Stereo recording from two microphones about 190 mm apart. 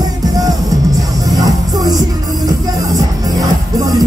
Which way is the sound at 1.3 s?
20° right (ahead or behind).